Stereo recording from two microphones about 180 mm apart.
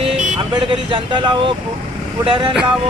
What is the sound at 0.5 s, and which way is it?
Speech, 30° right (ahead or behind).